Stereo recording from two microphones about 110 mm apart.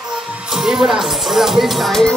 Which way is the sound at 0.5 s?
5° right (ahead or behind).